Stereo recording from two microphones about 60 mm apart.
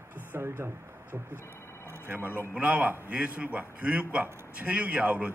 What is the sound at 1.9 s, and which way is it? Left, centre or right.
A man's voice, right.